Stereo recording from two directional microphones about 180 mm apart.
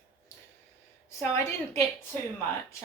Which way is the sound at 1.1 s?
15° left (ahead or behind).